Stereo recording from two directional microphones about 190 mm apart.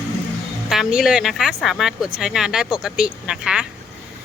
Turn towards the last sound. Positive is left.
turn(degrees=-5)  # may be behind; listen again after turning